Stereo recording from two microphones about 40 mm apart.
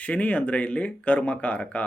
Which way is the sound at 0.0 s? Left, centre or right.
Left.